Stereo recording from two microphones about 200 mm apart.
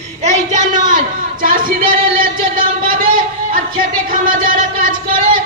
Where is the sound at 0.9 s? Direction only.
45° right (ahead or behind).